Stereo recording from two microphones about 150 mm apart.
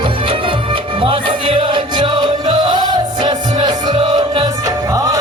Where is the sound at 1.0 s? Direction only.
35° right (ahead or behind).